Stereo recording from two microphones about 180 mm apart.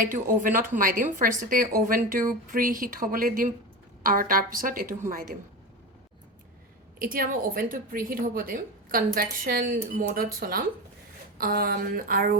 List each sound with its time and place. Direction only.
0.0 s a woman's voice: 50° right (ahead or behind)
7.0 s a woman's voice: 50° right (ahead or behind)